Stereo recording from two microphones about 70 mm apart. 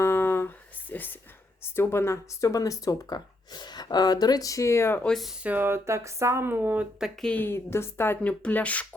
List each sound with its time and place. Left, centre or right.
0.0 s a sound: left
1.6 s a woman's voice: left
2.4 s speech: left
5.0 s speech: centre
5.4 s speech: right
5.6 s speech: right
7.3 s a woman's voice: left
8.2 s speech: centre